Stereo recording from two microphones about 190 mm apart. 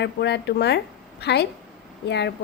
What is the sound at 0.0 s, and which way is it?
A woman's voice, 65° left (ahead or behind).